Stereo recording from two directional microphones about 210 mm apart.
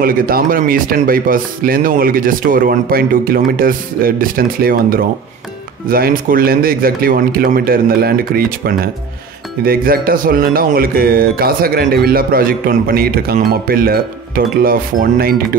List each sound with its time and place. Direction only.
0.0 s speech: 45° right (ahead or behind)